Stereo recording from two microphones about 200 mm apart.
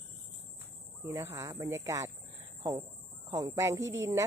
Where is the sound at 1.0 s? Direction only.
15° right (ahead or behind).